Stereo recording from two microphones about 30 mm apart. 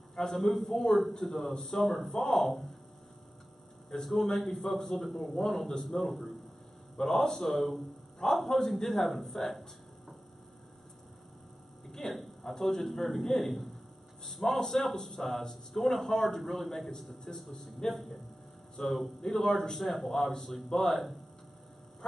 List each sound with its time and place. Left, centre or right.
0.1 s a man's voice: centre
1.8 s a man's voice: centre
2.1 s a man's voice: centre
4.0 s a man's voice: centre
12.1 s a sound: centre
12.5 s a man's voice: centre
17.8 s a man's voice: centre
19.8 s a man's voice: centre